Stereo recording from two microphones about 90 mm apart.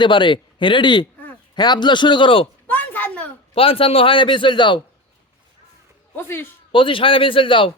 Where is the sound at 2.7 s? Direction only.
20° left (ahead or behind).